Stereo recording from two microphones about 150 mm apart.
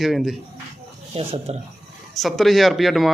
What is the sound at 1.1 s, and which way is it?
Speech, 45° right (ahead or behind).